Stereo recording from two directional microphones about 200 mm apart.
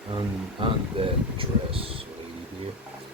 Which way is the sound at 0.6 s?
25° right (ahead or behind).